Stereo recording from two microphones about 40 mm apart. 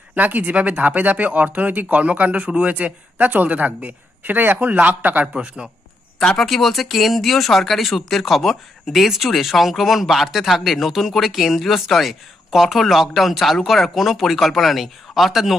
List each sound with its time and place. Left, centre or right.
0.1 s speech: right
4.6 s speech: right
5.3 s speech: right
6.1 s speech: centre